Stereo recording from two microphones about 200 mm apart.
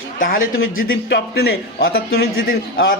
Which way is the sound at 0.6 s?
85° left.